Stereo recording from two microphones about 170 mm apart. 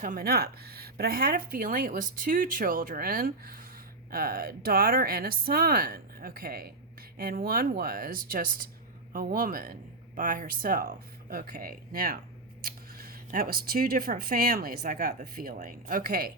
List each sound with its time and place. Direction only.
0.0 s speech: 55° right (ahead or behind)